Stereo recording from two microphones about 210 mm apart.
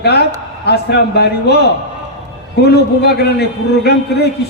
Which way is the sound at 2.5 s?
50° left (ahead or behind).